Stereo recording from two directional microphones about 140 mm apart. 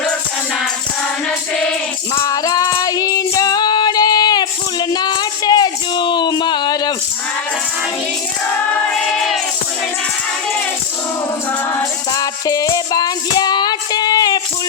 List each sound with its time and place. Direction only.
2.2 s female singing: 25° left (ahead or behind)
8.9 s music: 5° left (ahead or behind)
12.1 s music: 25° left (ahead or behind)